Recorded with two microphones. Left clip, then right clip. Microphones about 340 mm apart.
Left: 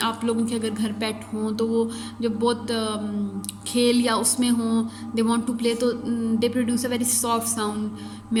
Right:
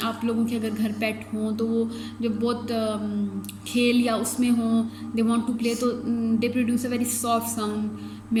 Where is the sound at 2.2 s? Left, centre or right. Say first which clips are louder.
Left 3 dB; left.